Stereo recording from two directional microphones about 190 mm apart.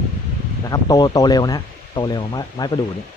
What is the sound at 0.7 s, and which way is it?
Speech, 20° left (ahead or behind).